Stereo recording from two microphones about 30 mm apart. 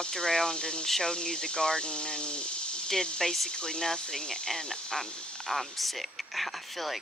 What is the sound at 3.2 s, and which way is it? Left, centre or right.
Speech, centre.